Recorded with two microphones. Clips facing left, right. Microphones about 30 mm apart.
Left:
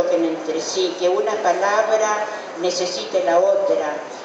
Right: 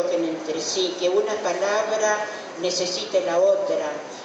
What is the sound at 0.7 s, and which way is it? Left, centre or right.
A woman's voice, centre.